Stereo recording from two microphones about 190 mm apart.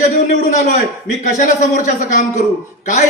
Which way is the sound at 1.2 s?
40° left (ahead or behind).